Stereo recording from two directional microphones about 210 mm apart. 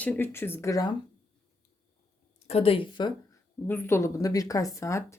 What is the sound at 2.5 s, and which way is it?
Speech, 25° left (ahead or behind).